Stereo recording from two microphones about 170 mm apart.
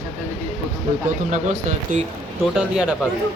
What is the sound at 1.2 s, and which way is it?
Speech, 45° right (ahead or behind).